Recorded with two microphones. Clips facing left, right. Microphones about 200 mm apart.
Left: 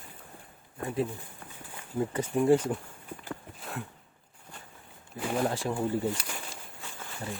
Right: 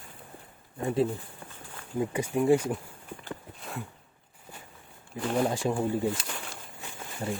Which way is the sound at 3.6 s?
Centre (ahead or behind).